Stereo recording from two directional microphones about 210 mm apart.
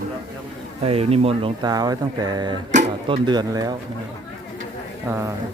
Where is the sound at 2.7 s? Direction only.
35° right (ahead or behind).